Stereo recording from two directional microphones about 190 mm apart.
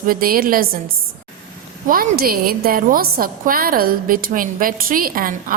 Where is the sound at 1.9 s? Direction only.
50° right (ahead or behind).